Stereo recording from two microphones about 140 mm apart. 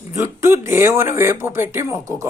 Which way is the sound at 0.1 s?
20° right (ahead or behind).